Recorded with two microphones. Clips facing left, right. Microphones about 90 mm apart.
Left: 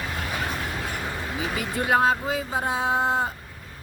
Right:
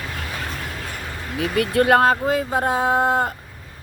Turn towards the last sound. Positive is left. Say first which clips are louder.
# right 5 dB
turn(degrees=-50)  # may be behind; listen again after turning